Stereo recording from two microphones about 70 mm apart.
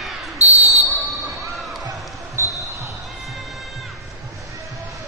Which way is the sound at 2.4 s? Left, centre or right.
Right.